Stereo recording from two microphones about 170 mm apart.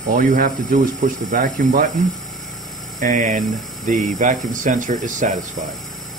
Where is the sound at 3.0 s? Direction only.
50° right (ahead or behind).